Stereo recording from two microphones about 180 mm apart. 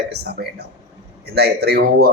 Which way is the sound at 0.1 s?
60° right (ahead or behind).